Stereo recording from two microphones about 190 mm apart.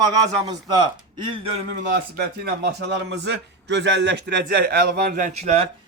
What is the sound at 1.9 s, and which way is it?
Speech, 55° right (ahead or behind).